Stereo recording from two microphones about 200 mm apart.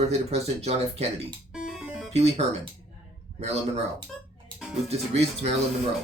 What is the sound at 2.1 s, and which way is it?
Speech, 30° right (ahead or behind).